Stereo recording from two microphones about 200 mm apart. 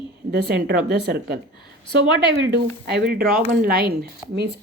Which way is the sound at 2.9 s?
50° right (ahead or behind).